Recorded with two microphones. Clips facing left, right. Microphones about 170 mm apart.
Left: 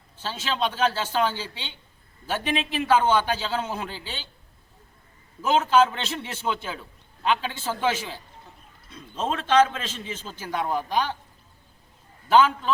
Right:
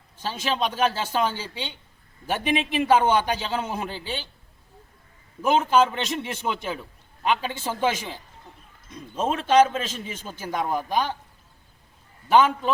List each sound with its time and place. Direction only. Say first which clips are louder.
0.2 s a man's voice: right 1 dB; 15° right (ahead or behind)
5.4 s a man's voice: even; 15° right (ahead or behind)